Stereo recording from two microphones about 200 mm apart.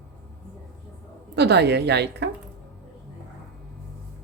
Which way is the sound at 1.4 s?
55° right (ahead or behind).